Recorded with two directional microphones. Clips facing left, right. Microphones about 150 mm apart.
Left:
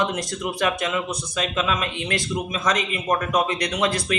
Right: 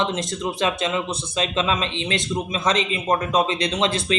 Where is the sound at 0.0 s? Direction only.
25° right (ahead or behind).